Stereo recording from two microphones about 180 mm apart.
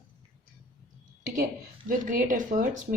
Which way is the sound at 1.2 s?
45° right (ahead or behind).